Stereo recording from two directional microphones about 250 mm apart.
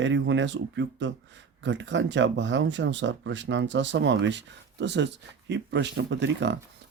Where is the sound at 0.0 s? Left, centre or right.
Right.